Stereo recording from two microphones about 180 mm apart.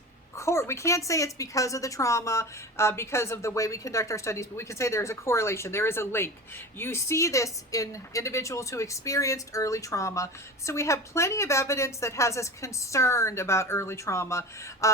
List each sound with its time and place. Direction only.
0.3 s a woman's voice: 15° left (ahead or behind)